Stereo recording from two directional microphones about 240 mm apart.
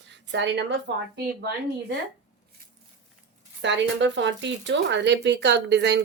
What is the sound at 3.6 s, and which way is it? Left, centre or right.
Speech, right.